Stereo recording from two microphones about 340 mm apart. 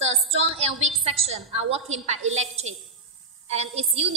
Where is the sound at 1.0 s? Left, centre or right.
Centre.